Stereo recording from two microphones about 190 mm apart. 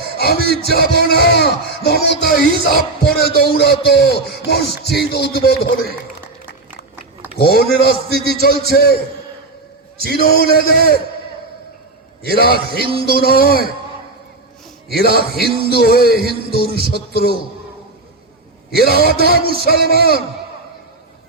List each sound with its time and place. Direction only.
0.2 s music: 55° left (ahead or behind)
0.9 s speech: 55° left (ahead or behind)
7.3 s speech: 55° left (ahead or behind)
10.0 s speech: 55° left (ahead or behind)
12.2 s a man's voice: 55° left (ahead or behind)
14.9 s speech: 55° left (ahead or behind)
18.7 s a man's voice: 55° left (ahead or behind)